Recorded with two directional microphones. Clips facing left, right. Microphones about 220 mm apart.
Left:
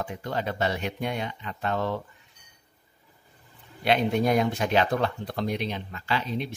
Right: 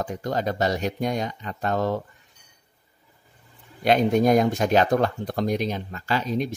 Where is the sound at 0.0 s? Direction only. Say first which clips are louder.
Right 4 dB; 40° right (ahead or behind).